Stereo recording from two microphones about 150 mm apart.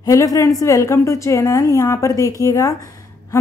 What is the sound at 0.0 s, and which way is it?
A woman's voice, 20° left (ahead or behind).